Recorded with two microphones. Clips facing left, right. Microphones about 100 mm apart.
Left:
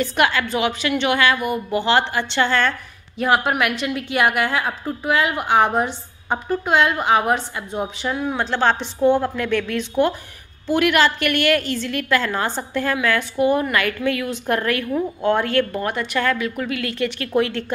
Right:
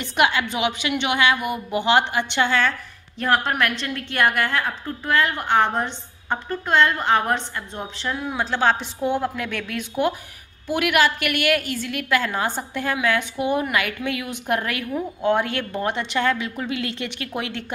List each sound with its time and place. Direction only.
0.0 s a woman's voice: 15° right (ahead or behind)
3.2 s a woman's voice: 10° left (ahead or behind); by 17.7 s 15° right (ahead or behind)